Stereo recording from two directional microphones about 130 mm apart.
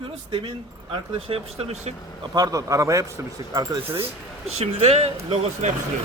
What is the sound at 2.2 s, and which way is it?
A man's voice, 30° right (ahead or behind).